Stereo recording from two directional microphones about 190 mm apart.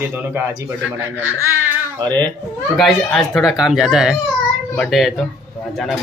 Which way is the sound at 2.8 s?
Centre (ahead or behind).